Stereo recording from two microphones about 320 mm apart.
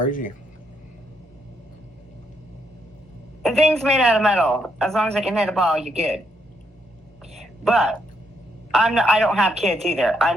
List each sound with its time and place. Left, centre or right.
0.0 s speech: left
3.4 s speech: centre
7.3 s a sound: centre
8.7 s speech: centre